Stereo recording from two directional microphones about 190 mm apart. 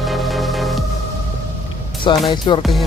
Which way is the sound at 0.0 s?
Centre (ahead or behind).